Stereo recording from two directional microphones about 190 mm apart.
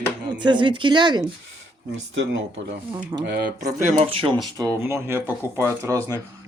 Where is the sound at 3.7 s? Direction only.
40° right (ahead or behind).